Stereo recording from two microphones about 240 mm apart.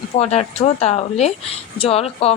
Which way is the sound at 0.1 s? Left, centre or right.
Left.